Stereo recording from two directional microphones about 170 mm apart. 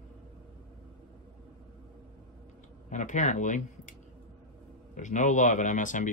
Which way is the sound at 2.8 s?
45° left (ahead or behind).